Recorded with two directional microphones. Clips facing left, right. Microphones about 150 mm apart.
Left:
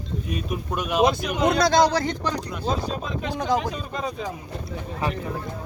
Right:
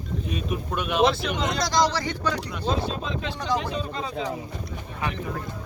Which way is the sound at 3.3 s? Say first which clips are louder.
Left 4 dB; 50° left (ahead or behind).